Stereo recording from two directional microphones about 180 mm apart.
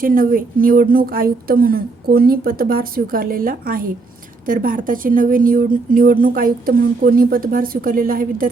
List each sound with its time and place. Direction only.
0.0 s speech: 50° right (ahead or behind)